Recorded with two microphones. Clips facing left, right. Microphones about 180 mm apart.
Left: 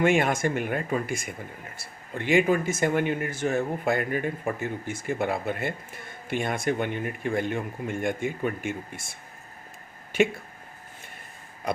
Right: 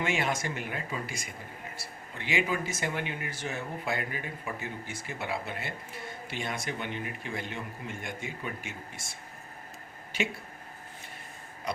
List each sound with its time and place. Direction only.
0.0 s speech: 50° left (ahead or behind)